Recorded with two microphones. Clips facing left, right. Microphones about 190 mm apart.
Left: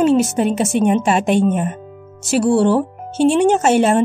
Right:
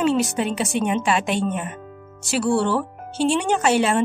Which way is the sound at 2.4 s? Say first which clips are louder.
Left 6 dB; 20° left (ahead or behind).